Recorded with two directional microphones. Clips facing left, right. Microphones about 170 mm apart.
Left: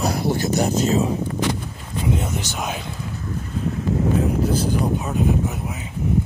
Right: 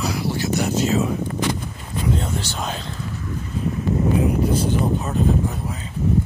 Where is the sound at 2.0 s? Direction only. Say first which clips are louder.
Even; 15° left (ahead or behind).